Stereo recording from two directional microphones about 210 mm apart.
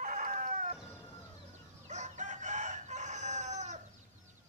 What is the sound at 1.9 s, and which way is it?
Chicken, 35° right (ahead or behind).